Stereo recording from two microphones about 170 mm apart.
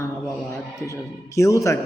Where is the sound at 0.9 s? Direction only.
20° left (ahead or behind).